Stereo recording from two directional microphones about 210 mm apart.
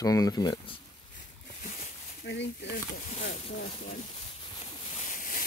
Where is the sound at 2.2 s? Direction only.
55° left (ahead or behind).